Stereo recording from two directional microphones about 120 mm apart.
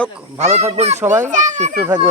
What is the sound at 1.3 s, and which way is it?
Speech, 90° right.